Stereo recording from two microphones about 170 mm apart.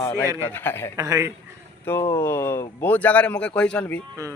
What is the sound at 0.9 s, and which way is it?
Speech, 20° right (ahead or behind).